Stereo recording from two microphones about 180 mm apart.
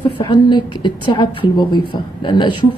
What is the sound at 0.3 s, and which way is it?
A woman's voice, 25° left (ahead or behind).